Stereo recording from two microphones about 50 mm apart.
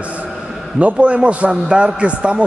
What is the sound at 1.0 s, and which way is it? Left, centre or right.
A man's voice, right.